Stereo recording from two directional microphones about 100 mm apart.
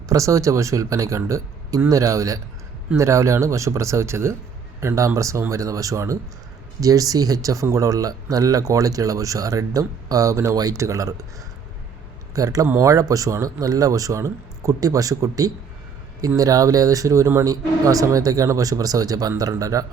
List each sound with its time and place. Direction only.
0.1 s speech: 35° right (ahead or behind)
12.3 s speech: 35° right (ahead or behind)